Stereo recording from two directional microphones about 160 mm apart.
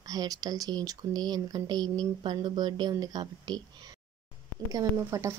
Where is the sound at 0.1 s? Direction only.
25° right (ahead or behind).